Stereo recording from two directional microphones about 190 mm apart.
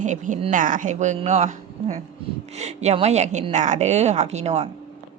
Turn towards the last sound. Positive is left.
turn(degrees=-35)  # may be behind; listen again after turning